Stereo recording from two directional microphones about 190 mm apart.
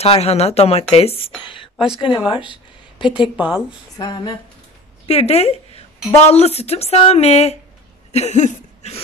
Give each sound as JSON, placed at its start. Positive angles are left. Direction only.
{"t": 0.0, "sound": "a woman's voice", "side_deg": 35}
{"t": 3.3, "sound": "speech", "side_deg": -5}
{"t": 4.0, "sound": "speech", "side_deg": 25}
{"t": 8.1, "sound": "a sound", "side_deg": 35}